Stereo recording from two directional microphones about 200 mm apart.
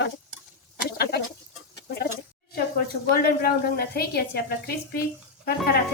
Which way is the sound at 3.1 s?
50° left (ahead or behind).